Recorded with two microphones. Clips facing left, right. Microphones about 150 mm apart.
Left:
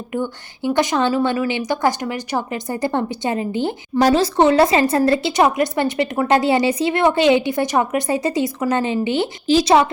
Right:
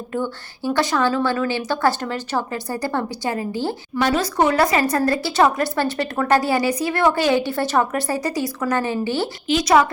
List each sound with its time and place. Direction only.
0.1 s speech: 20° left (ahead or behind)
3.9 s speech: 35° left (ahead or behind)